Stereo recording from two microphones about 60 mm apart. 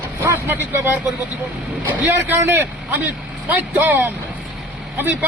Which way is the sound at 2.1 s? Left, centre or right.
Right.